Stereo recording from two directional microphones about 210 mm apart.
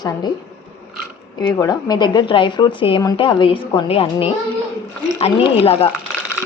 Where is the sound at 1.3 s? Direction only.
20° left (ahead or behind).